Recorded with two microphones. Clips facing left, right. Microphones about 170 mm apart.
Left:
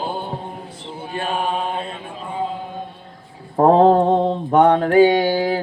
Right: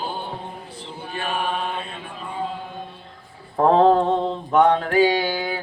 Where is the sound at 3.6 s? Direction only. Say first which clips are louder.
Left 3 dB; 40° left (ahead or behind).